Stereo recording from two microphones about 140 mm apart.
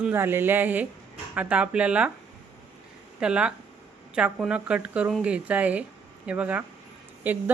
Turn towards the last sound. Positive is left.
turn(degrees=-15)  # may be behind; listen again after turning